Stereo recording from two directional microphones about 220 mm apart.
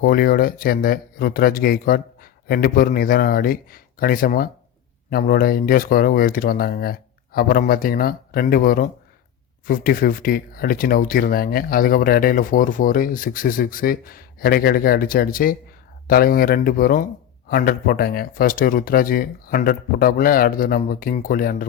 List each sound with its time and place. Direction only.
0.0 s speech: 45° left (ahead or behind)